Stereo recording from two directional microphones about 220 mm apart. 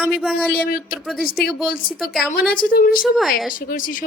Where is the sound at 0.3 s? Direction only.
45° left (ahead or behind).